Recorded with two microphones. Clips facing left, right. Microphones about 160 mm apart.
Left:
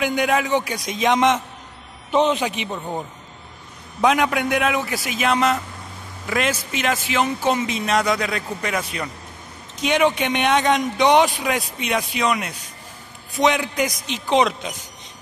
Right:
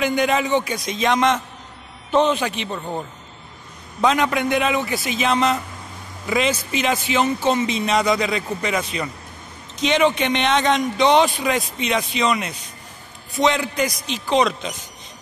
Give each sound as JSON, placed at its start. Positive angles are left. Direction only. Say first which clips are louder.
{"t": 0.0, "sound": "a man's voice", "louder": "right 1 dB", "side_deg": 5}
{"t": 4.0, "sound": "a man's voice", "louder": "even", "side_deg": 10}